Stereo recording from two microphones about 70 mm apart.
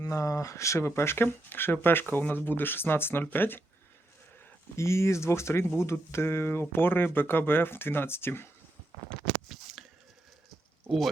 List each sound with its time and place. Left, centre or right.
0.0 s speech: left
4.8 s speech: left
9.5 s a sound: centre